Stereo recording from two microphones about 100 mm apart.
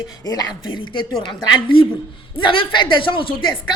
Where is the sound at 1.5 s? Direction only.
55° left (ahead or behind).